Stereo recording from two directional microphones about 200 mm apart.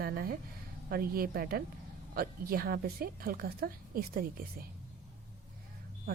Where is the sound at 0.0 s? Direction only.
45° right (ahead or behind).